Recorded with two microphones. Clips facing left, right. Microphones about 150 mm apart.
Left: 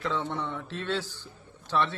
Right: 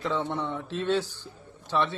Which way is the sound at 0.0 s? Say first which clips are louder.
Right 2 dB; 15° right (ahead or behind).